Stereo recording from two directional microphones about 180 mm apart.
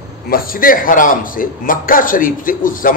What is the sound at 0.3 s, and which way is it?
A man's voice, 55° left (ahead or behind).